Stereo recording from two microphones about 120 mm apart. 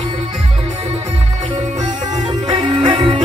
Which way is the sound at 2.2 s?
40° right (ahead or behind).